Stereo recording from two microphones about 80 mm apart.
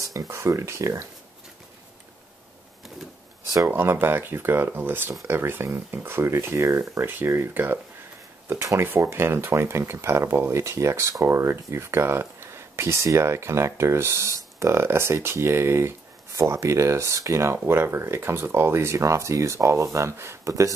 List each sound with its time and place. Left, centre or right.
0.0 s speech: right
3.6 s speech: right